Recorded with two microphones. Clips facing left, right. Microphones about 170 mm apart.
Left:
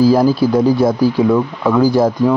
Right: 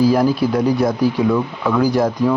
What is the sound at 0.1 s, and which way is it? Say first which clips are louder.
Speech: left 4 dB; 30° left (ahead or behind).